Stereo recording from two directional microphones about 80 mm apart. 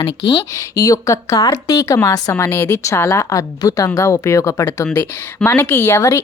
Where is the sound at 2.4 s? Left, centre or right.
Left.